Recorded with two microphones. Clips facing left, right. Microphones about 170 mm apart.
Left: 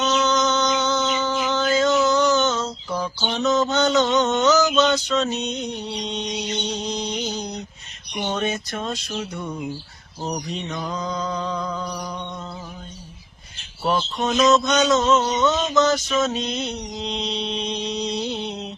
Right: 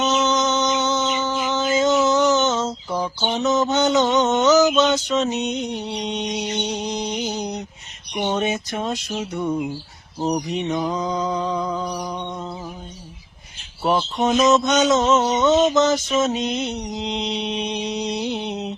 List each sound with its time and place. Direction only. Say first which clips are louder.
0.0 s a sound: right 1 dB; 20° right (ahead or behind)
8.1 s mantra: right 3 dB; 20° right (ahead or behind)
13.8 s speech: right 3 dB; 15° right (ahead or behind)